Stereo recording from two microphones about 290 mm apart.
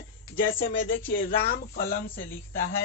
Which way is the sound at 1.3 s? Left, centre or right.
Left.